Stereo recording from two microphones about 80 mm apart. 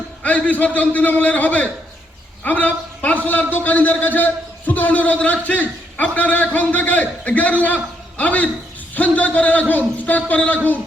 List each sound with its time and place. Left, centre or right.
0.2 s a man's voice: centre